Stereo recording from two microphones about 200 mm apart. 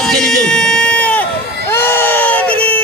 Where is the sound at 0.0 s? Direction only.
Centre (ahead or behind).